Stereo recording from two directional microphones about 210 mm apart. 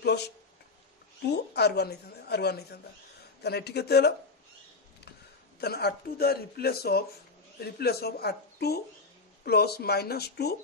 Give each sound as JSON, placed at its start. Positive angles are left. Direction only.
{"t": 1.2, "sound": "speech", "side_deg": 50}
{"t": 5.6, "sound": "speech", "side_deg": 50}